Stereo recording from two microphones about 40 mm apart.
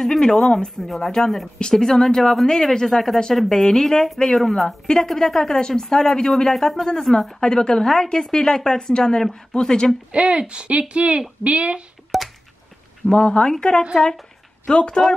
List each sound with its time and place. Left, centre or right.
0.0 s a woman's voice: centre
0.8 s a woman's voice: centre
10.1 s speech: right
12.1 s a sound: centre
13.1 s speech: left